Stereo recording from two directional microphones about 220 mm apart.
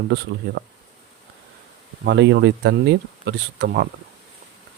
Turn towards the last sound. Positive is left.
turn(degrees=-50)  # may be behind; listen again after turning